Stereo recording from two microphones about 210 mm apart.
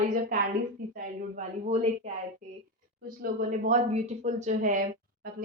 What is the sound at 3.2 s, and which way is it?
Speech, 35° right (ahead or behind).